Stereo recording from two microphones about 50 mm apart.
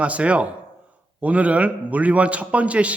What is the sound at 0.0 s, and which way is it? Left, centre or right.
A man's voice, right.